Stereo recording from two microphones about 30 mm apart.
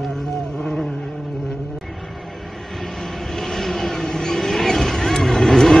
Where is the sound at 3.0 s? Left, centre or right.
Centre.